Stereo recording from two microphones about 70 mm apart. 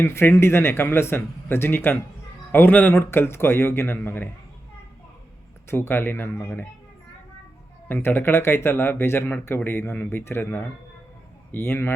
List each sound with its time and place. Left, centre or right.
0.0 s speech: left
5.6 s speech: left
8.0 s speech: left